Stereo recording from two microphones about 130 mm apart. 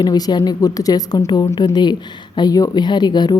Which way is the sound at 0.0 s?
30° left (ahead or behind).